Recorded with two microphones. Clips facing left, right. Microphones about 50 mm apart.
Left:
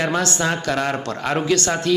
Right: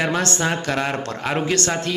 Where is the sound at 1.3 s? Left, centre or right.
Right.